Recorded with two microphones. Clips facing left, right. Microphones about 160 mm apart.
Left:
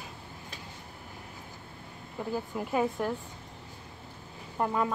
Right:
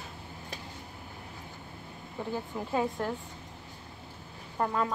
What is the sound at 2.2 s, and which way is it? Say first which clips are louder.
Speech: left 2 dB; 5° left (ahead or behind).